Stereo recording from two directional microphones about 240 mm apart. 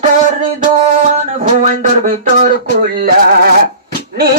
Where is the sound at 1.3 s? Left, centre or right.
Right.